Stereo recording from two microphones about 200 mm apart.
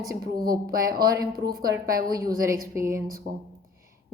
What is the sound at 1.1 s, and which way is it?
Speech, 15° right (ahead or behind).